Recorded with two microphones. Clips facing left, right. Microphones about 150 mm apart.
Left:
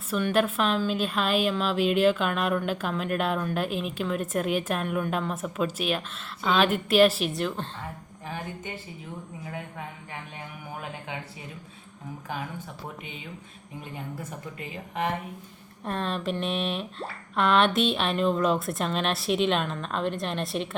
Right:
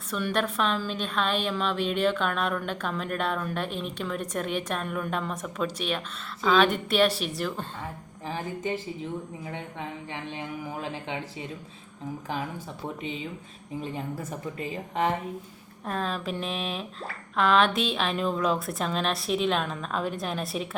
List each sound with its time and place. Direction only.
0.1 s a woman's voice: 5° left (ahead or behind)
9.5 s speech: 25° right (ahead or behind)
13.9 s a woman's voice: 40° right (ahead or behind)
15.8 s a woman's voice: centre (ahead or behind)